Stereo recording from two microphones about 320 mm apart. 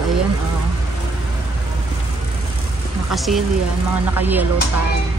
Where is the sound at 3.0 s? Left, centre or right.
Centre.